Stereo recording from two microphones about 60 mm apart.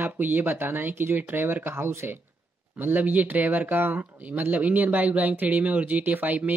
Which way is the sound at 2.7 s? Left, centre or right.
Right.